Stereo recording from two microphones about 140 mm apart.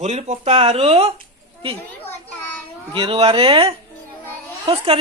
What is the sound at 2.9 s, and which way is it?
Speech, 40° right (ahead or behind).